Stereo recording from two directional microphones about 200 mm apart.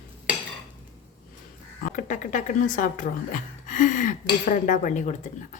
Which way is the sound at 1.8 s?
40° left (ahead or behind).